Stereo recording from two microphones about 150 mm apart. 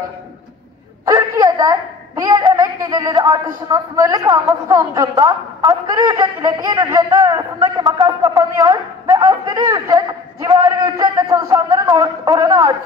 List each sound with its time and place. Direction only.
1.0 s a woman's voice: 25° right (ahead or behind)